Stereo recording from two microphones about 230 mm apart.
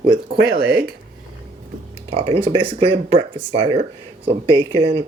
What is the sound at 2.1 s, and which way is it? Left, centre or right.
Speech, right.